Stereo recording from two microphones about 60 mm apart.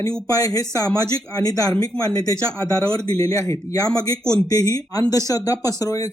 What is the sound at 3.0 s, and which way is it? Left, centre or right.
Speech, left.